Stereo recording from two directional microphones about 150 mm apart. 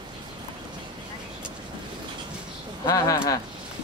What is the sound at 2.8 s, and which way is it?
Speech, 20° left (ahead or behind).